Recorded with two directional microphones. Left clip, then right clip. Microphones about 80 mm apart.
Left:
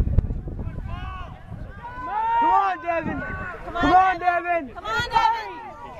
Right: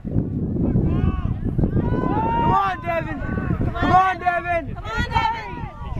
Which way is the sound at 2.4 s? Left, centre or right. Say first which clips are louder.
Even; right.